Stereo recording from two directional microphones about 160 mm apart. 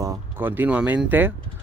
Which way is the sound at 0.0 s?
10° right (ahead or behind).